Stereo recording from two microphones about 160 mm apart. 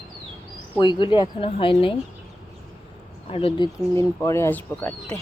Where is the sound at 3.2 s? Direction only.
35° left (ahead or behind).